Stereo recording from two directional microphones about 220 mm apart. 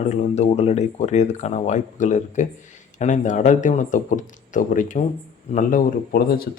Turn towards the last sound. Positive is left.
turn(degrees=40)  # may be behind; listen again after turning